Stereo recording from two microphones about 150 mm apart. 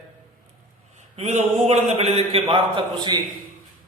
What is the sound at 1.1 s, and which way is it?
Mantra, 45° right (ahead or behind).